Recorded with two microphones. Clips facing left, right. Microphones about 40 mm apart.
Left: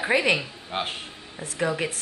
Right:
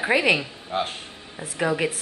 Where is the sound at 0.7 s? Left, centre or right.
Left.